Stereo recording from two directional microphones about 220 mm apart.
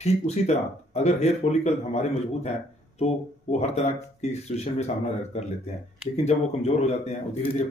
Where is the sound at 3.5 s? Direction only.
30° left (ahead or behind).